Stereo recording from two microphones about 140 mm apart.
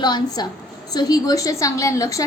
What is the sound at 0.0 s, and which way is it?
A woman's voice, 30° left (ahead or behind).